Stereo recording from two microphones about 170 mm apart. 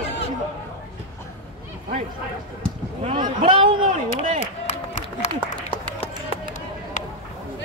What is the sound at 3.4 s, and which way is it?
Speech, 30° right (ahead or behind).